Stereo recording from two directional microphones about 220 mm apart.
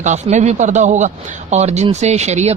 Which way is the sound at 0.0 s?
30° right (ahead or behind).